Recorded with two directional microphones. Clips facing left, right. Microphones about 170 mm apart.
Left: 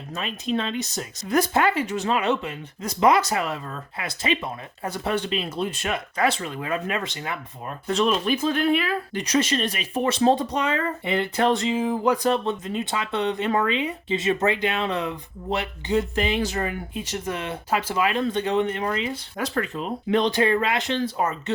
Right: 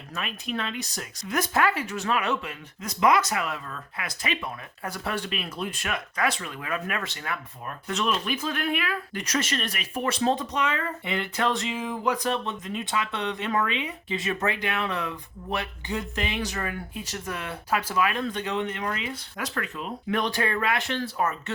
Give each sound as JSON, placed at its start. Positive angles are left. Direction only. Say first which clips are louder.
{"t": 0.1, "sound": "speech", "louder": "left 6 dB", "side_deg": 25}
{"t": 7.9, "sound": "speech", "louder": "left 6 dB", "side_deg": 35}
{"t": 9.2, "sound": "speech", "louder": "left 6 dB", "side_deg": 20}